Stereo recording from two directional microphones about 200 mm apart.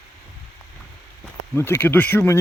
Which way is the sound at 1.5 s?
10° left (ahead or behind).